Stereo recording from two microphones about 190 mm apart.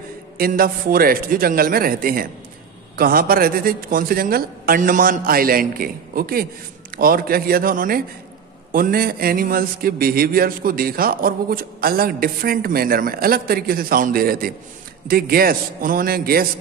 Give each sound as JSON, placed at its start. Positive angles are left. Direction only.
{"t": 0.4, "sound": "a man's voice", "side_deg": -50}